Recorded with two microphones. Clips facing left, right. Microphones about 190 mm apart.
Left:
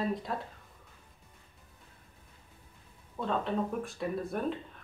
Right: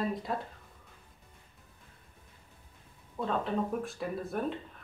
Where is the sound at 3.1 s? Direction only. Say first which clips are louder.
Even; centre (ahead or behind).